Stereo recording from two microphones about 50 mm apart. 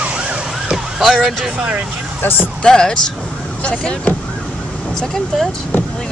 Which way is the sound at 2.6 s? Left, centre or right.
Centre.